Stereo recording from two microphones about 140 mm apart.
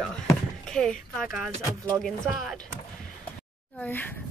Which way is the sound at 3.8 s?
15° left (ahead or behind).